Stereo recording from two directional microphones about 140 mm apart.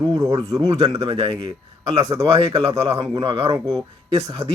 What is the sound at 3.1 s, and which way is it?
Speech, 30° right (ahead or behind).